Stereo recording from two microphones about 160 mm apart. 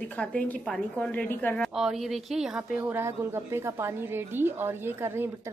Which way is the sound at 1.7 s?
Centre (ahead or behind).